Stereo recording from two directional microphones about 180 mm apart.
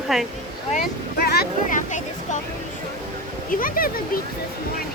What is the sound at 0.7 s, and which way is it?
Speech, 60° left (ahead or behind).